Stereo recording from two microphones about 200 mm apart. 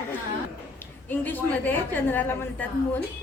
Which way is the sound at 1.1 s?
10° left (ahead or behind).